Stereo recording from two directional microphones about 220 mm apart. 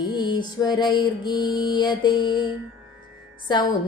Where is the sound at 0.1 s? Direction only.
20° left (ahead or behind).